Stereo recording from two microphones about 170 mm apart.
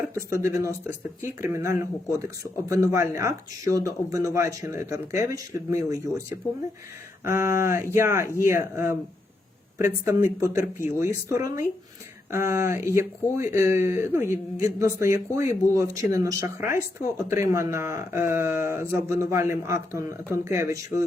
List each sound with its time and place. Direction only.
0.1 s speech: 15° right (ahead or behind)
7.3 s speech: 15° right (ahead or behind)